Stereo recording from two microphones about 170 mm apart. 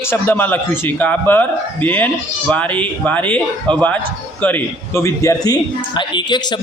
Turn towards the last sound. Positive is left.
turn(degrees=25)  # may be behind; listen again after turning